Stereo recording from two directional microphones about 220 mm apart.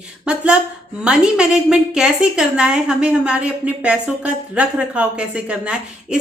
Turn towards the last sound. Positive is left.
turn(degrees=-5)  # may be behind; listen again after turning